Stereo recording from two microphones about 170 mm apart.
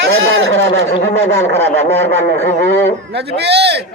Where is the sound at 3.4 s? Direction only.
80° right.